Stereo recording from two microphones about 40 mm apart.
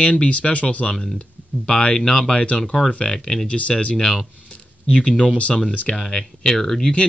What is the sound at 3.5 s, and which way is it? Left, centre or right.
Speech, left.